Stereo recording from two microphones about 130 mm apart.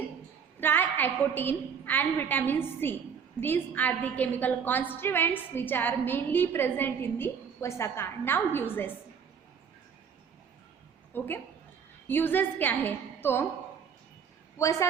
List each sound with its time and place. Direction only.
0.6 s a woman's voice: 15° left (ahead or behind)
11.1 s a woman's voice: 15° left (ahead or behind)
14.6 s a woman's voice: 25° left (ahead or behind)